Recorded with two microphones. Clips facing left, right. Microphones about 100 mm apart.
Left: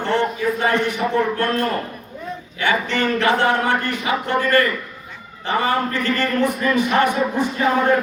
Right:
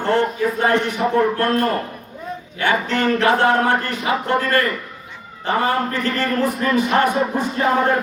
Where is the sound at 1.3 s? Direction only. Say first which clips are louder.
Right 2 dB; 40° right (ahead or behind).